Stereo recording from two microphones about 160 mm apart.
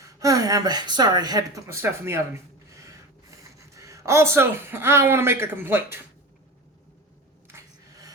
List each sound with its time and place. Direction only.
0.0 s speech: 20° right (ahead or behind)
3.8 s a man's voice: 20° right (ahead or behind)
7.4 s a sound: 20° right (ahead or behind)